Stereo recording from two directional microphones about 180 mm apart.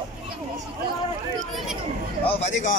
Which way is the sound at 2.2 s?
30° left (ahead or behind).